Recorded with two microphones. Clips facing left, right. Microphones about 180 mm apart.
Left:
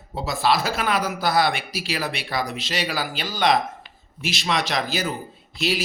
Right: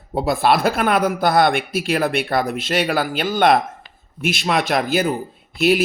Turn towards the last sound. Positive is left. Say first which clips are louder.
# right 9 dB
turn(degrees=-55)  # may be behind; listen again after turning